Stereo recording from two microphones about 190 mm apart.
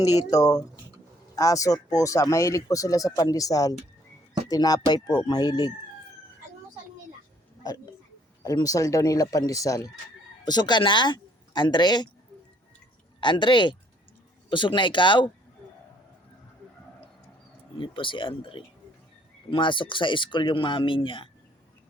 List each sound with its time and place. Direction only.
0.3 s speech: 20° left (ahead or behind)
8.4 s speech: 20° left (ahead or behind)
13.1 s speech: 25° left (ahead or behind)
17.7 s speech: 25° left (ahead or behind)